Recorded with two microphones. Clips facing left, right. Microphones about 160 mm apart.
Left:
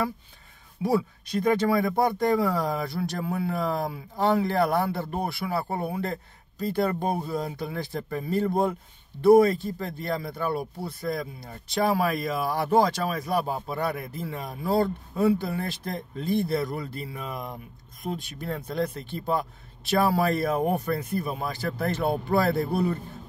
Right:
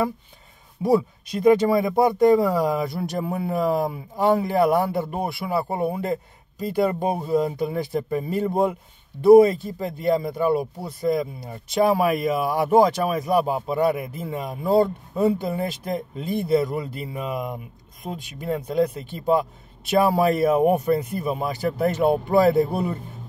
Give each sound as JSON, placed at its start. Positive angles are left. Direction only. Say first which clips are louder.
{"t": 0.8, "sound": "speech", "louder": "right 5 dB", "side_deg": -20}